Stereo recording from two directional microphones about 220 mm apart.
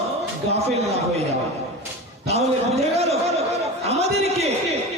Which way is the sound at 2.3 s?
30° right (ahead or behind).